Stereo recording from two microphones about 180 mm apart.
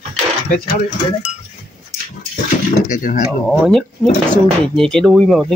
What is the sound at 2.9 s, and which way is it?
Speech, 45° left (ahead or behind).